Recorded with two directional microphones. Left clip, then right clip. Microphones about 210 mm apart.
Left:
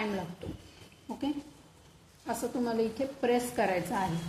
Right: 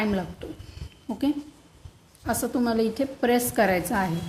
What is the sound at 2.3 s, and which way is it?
A woman's voice, 40° right (ahead or behind).